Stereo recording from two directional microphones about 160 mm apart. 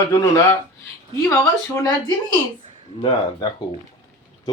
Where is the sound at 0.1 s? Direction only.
20° left (ahead or behind).